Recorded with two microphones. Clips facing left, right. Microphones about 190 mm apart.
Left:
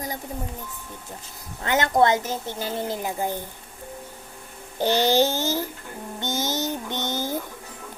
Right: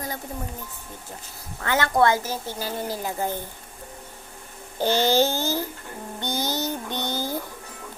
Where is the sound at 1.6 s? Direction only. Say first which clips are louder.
Left 1 dB; 20° left (ahead or behind).